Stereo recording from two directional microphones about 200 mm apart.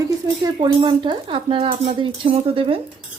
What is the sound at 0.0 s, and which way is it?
Speech, 20° right (ahead or behind).